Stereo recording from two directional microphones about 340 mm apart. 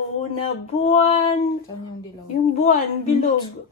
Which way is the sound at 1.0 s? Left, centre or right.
Centre.